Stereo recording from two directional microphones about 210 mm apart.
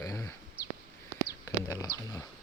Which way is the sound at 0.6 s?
5° right (ahead or behind).